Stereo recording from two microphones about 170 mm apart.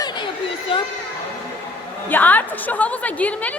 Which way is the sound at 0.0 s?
25° left (ahead or behind).